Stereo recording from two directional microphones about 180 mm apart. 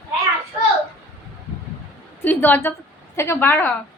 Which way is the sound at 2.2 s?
10° left (ahead or behind).